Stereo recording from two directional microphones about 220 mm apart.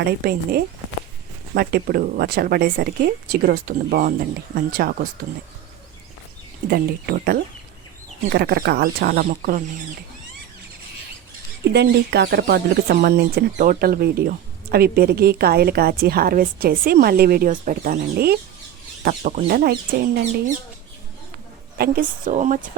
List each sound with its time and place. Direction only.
0.0 s a woman's voice: 45° right (ahead or behind)
6.7 s speech: 45° right (ahead or behind)
11.7 s speech: 50° right (ahead or behind)
21.8 s a woman's voice: 40° right (ahead or behind)